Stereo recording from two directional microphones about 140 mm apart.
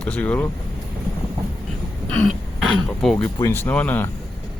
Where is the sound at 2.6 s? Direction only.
5° left (ahead or behind).